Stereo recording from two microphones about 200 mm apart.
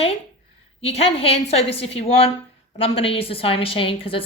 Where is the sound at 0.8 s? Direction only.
30° left (ahead or behind).